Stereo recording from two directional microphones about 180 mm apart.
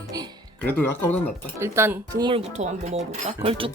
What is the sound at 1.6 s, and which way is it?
Speech, 15° right (ahead or behind).